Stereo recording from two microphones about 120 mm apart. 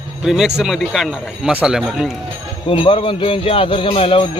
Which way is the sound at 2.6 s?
45° left (ahead or behind).